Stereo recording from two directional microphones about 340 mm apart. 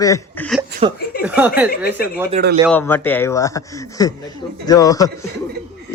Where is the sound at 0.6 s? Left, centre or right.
Centre.